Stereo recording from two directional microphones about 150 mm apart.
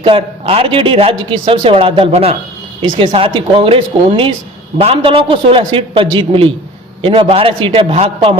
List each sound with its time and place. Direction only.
0.0 s a man's voice: 40° right (ahead or behind)